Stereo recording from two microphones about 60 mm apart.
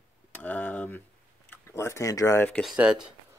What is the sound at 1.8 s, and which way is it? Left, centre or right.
Speech, left.